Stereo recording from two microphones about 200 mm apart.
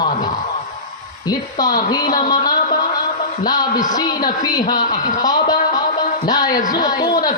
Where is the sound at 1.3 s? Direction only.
20° left (ahead or behind).